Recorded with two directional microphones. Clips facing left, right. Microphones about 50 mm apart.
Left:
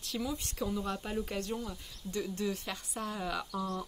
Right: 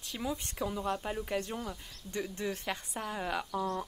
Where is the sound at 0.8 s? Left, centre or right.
Centre.